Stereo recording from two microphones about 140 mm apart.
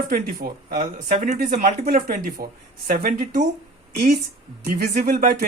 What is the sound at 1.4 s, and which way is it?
Speech, 80° right.